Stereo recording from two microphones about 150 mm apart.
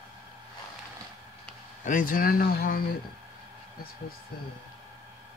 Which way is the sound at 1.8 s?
65° left (ahead or behind).